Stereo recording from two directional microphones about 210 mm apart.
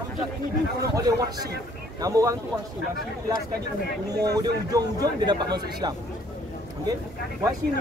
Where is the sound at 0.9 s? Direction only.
20° right (ahead or behind).